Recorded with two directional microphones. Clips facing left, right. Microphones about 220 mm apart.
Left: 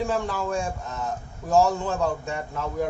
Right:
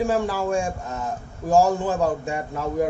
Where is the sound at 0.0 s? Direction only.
10° right (ahead or behind).